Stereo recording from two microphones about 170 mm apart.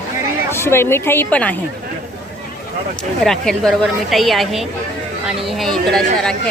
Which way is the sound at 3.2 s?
Centre (ahead or behind).